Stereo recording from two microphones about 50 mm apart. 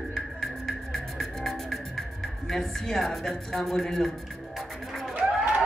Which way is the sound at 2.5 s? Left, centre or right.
Centre.